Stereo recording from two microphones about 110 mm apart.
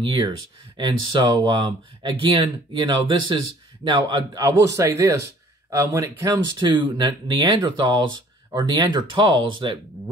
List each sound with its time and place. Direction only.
0.0 s speech: 45° right (ahead or behind)
6.7 s speech: 45° right (ahead or behind)